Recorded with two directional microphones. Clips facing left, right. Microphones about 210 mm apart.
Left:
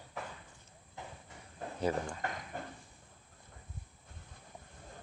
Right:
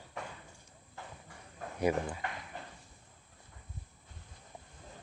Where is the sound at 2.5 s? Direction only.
50° left (ahead or behind).